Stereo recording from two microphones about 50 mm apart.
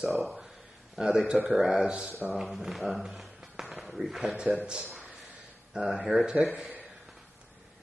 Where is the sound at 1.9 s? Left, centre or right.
Right.